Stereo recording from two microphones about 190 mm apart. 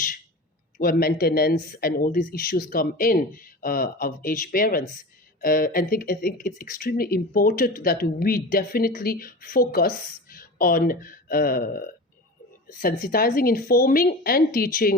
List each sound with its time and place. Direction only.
0.8 s speech: 50° left (ahead or behind)